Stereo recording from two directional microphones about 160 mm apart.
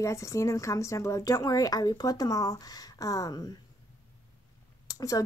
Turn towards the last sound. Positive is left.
turn(degrees=20)  # may be behind; listen again after turning